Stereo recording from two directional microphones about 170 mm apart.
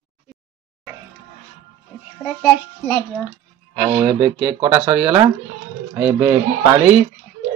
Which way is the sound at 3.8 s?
25° right (ahead or behind).